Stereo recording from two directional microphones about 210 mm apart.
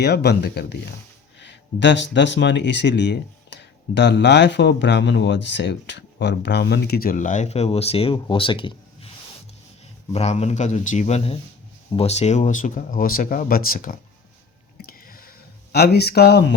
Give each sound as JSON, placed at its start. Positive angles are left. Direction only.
{"t": 0.0, "sound": "speech", "side_deg": 50}
{"t": 10.1, "sound": "speech", "side_deg": 30}
{"t": 14.8, "sound": "a sound", "side_deg": 45}
{"t": 15.7, "sound": "speech", "side_deg": 50}